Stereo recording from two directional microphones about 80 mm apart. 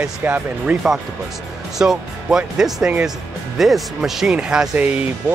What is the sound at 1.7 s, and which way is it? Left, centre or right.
Speech, centre.